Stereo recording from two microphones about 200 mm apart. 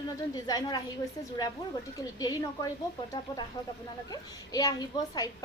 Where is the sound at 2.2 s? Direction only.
20° left (ahead or behind).